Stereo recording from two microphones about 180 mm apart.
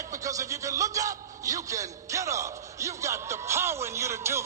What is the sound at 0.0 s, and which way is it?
A man's voice, 20° right (ahead or behind).